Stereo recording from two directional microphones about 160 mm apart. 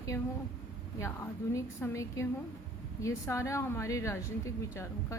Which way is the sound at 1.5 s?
20° left (ahead or behind).